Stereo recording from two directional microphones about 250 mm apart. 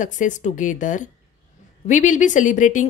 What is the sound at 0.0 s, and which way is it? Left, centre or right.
A woman's voice, left.